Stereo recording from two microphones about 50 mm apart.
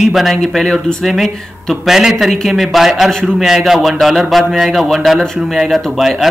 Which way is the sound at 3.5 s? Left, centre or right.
Centre.